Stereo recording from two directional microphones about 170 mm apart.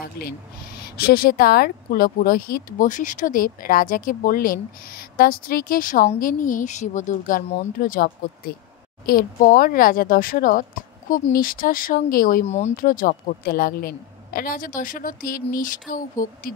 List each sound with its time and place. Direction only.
0.2 s speech: 65° left (ahead or behind)
12.4 s speech: 40° left (ahead or behind)
12.7 s speech: 55° left (ahead or behind)